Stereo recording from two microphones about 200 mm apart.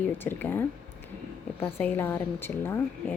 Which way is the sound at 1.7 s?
10° left (ahead or behind).